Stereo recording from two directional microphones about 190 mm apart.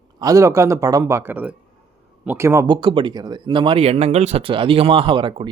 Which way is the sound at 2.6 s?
25° right (ahead or behind).